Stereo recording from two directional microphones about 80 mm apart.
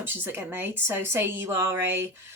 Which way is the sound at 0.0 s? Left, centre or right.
Right.